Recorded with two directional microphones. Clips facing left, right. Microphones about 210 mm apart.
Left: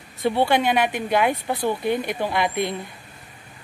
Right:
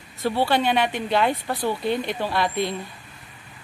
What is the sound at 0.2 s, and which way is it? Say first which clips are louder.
Speech: left 2 dB; 15° left (ahead or behind).